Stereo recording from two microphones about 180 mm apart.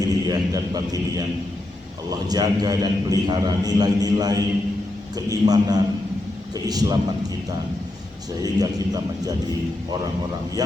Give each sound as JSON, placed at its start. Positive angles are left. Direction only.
{"t": 0.3, "sound": "a man's voice", "side_deg": -20}
{"t": 2.0, "sound": "a man's voice", "side_deg": -20}
{"t": 8.4, "sound": "a man's voice", "side_deg": -20}